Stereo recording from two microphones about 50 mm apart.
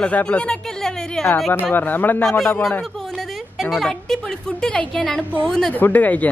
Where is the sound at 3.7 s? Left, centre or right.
Centre.